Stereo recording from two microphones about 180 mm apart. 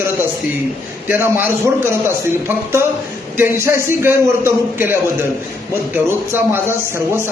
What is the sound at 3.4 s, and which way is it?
A man's voice, 15° right (ahead or behind).